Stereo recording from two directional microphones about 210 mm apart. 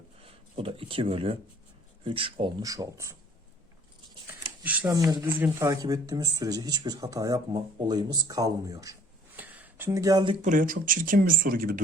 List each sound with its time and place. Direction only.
0.2 s speech: 25° right (ahead or behind)
4.3 s speech: 10° right (ahead or behind)
10.4 s speech: 40° right (ahead or behind)